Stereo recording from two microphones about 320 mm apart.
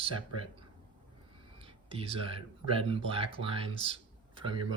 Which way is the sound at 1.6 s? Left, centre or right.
Centre.